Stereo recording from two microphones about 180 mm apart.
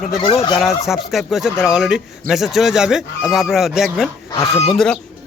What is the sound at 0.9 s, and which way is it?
A man's voice, centre (ahead or behind).